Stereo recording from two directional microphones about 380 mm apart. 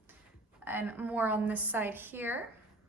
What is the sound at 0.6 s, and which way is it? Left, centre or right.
A woman's voice, centre.